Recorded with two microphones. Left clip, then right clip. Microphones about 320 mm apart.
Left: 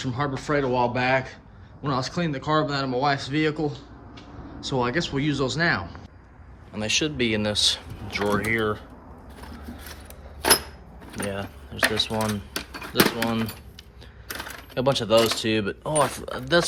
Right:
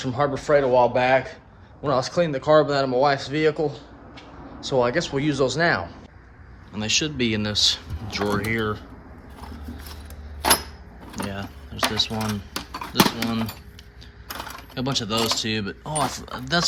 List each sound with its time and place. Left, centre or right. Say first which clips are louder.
0.0 s speech: right 5 dB; centre
11.1 s speech: left 1 dB; centre
14.8 s speech: left 5 dB; centre